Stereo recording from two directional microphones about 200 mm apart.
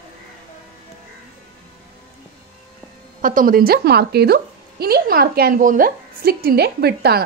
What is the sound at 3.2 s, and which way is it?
A woman's voice, 45° right (ahead or behind).